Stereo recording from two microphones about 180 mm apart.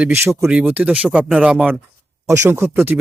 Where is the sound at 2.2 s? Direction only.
15° right (ahead or behind).